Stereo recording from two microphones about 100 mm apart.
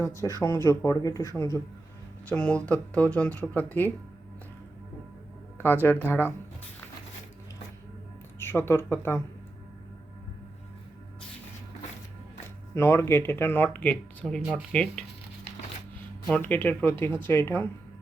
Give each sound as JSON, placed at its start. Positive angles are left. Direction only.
{"t": 0.0, "sound": "speech", "side_deg": 30}
{"t": 2.3, "sound": "speech", "side_deg": 10}
{"t": 5.5, "sound": "speech", "side_deg": 20}
{"t": 8.4, "sound": "speech", "side_deg": 25}
{"t": 12.7, "sound": "speech", "side_deg": 25}
{"t": 16.3, "sound": "speech", "side_deg": 20}